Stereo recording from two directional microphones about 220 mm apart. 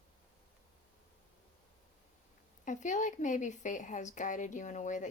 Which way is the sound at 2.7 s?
35° left (ahead or behind).